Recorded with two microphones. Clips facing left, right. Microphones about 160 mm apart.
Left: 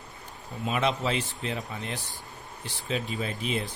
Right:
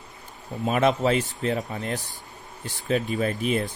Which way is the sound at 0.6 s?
45° right (ahead or behind).